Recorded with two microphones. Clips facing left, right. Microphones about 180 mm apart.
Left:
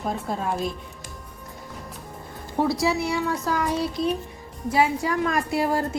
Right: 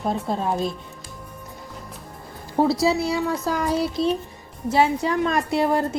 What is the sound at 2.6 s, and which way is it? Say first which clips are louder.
A woman's voice: right 3 dB; 35° right (ahead or behind).